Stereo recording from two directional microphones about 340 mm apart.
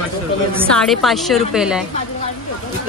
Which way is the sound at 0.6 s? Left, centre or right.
Centre.